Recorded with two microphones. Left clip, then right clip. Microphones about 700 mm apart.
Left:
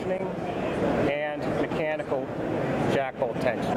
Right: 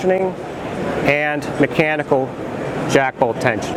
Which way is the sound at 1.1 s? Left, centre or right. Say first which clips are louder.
Right 9 dB; right.